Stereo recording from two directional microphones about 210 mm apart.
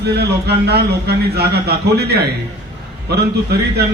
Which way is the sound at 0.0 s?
50° right (ahead or behind).